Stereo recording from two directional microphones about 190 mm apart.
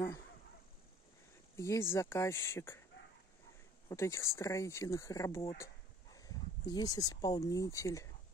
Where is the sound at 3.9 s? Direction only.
15° left (ahead or behind).